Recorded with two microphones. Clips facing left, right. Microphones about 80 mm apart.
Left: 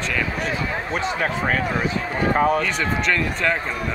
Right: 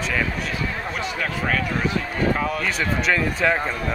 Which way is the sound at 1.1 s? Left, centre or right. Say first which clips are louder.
Even; left.